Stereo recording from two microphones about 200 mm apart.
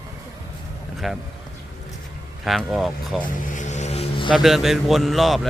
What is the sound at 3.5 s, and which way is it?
Music, 35° left (ahead or behind).